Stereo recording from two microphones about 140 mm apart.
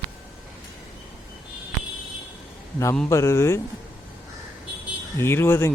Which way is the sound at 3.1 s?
20° left (ahead or behind).